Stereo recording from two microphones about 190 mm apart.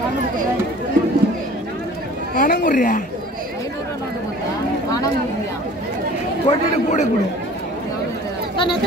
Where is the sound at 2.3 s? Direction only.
45° left (ahead or behind).